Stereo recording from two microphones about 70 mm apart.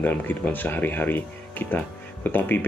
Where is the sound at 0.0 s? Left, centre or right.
Left.